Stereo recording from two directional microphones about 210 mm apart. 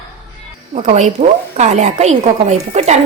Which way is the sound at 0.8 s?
35° right (ahead or behind).